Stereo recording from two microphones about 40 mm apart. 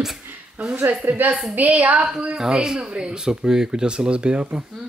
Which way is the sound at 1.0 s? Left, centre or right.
Right.